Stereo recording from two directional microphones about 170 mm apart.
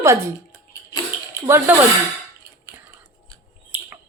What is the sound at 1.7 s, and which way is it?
Speech, 10° right (ahead or behind).